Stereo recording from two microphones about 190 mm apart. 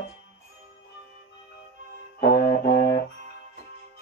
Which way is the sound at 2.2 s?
50° left (ahead or behind).